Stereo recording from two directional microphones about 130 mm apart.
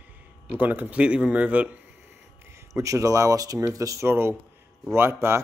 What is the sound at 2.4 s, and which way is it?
Speech, 20° right (ahead or behind).